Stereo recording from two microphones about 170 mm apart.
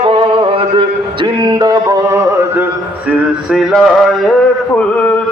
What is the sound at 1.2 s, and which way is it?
Music, 25° right (ahead or behind).